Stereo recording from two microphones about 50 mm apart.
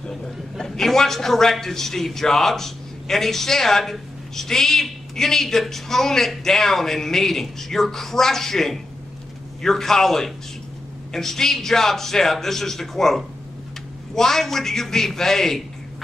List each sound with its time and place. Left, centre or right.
0.1 s a man's voice: centre